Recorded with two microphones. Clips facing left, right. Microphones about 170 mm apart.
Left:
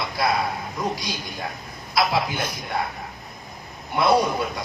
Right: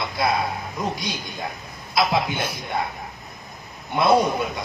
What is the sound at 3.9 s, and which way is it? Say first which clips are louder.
Speech: right 1 dB; 25° right (ahead or behind).